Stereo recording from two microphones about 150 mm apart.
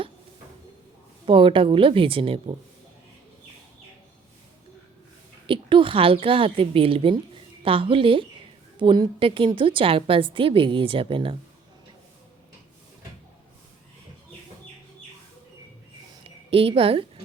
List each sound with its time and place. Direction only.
1.2 s a woman's voice: 35° right (ahead or behind)
5.5 s a woman's voice: 35° right (ahead or behind)
16.5 s a woman's voice: 40° right (ahead or behind)